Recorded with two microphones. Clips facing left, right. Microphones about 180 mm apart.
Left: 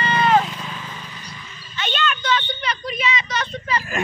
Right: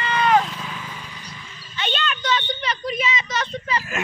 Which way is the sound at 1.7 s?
35° right (ahead or behind).